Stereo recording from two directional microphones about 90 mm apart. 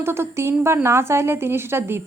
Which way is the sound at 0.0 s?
30° right (ahead or behind).